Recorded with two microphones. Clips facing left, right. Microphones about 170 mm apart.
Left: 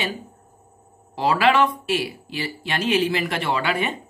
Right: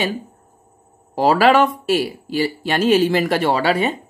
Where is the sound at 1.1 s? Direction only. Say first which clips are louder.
Right 5 dB; 40° right (ahead or behind).